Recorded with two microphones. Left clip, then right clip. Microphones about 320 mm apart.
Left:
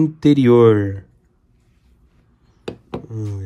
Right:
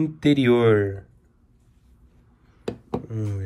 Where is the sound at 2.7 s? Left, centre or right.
Centre.